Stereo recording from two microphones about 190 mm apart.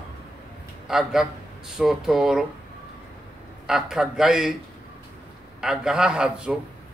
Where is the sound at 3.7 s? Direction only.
5° right (ahead or behind).